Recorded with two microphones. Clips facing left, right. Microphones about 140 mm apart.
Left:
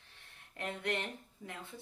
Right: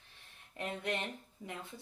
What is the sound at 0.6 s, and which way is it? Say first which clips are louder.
Speech: even; 20° right (ahead or behind).